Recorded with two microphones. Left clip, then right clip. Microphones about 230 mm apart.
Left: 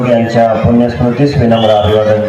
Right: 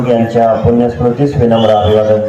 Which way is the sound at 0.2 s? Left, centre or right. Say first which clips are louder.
Even; right.